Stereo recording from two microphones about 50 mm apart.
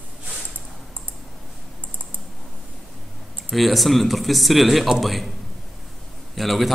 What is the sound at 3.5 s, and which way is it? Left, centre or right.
Speech, centre.